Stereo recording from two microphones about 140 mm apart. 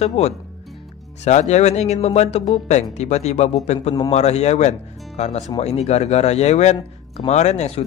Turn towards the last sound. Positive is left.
turn(degrees=50)  # may be behind; listen again after turning